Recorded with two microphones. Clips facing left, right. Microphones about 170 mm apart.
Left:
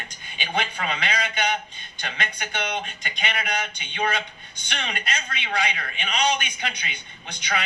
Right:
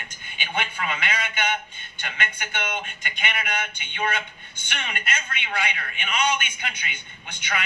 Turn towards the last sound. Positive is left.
turn(degrees=35)  # may be behind; listen again after turning